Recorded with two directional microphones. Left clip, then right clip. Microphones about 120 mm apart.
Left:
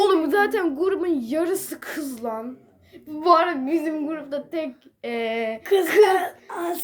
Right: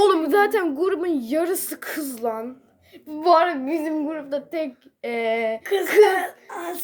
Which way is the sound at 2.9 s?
40° right (ahead or behind).